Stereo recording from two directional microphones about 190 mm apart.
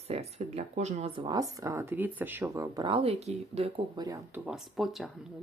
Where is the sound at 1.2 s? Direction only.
20° right (ahead or behind).